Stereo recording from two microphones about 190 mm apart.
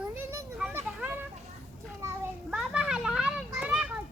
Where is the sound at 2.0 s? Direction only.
5° right (ahead or behind).